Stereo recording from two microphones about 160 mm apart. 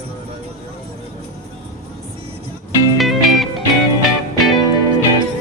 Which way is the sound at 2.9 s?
Centre (ahead or behind).